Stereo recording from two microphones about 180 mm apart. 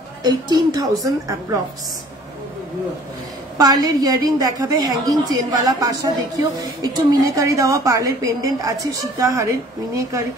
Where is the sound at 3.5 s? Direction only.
20° right (ahead or behind).